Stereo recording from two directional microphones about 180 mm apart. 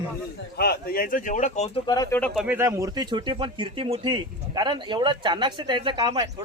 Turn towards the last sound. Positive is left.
turn(degrees=-25)  # may be behind; listen again after turning